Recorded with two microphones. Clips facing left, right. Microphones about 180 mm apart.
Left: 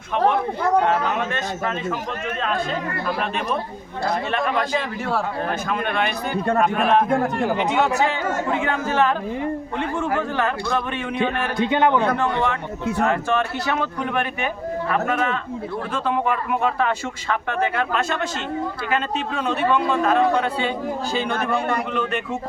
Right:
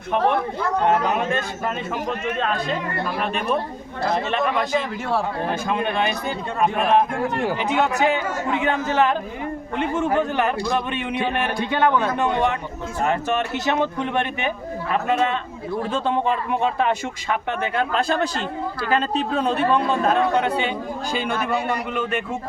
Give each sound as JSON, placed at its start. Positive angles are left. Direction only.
{"t": 7.9, "sound": "a man's voice", "side_deg": -15}
{"t": 11.5, "sound": "a man's voice", "side_deg": 20}
{"t": 12.1, "sound": "speech", "side_deg": -20}
{"t": 17.9, "sound": "speech", "side_deg": -35}